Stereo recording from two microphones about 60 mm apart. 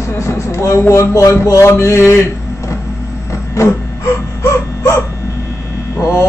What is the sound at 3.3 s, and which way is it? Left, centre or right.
Printer, left.